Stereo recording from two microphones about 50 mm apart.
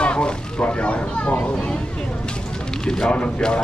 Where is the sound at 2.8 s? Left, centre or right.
Centre.